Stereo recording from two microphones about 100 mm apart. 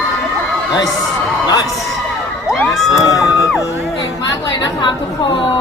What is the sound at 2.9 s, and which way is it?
Music, 35° left (ahead or behind).